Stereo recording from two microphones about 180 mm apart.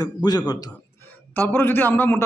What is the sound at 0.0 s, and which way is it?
Speech, 20° left (ahead or behind).